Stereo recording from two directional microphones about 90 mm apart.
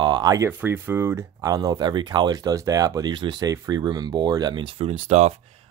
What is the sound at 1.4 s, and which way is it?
Speech, 45° right (ahead or behind).